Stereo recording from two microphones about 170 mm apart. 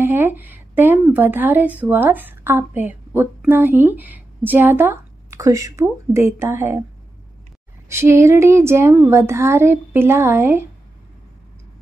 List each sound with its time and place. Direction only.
0.0 s a woman's voice: 10° right (ahead or behind)
7.9 s a woman's voice: 15° right (ahead or behind)